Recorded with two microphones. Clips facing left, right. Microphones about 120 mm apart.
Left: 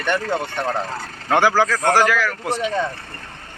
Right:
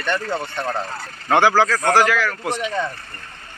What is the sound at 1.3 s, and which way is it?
Speech, 15° right (ahead or behind).